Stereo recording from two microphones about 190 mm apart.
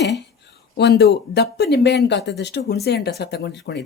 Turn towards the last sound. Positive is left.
turn(degrees=65)  # may be behind; listen again after turning